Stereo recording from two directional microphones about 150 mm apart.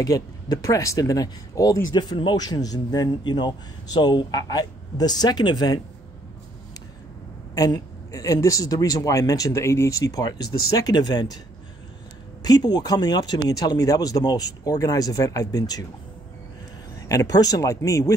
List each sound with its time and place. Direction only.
0.0 s speech: 25° left (ahead or behind)
7.5 s speech: 25° left (ahead or behind)
12.4 s speech: 25° left (ahead or behind)
17.1 s speech: 25° left (ahead or behind)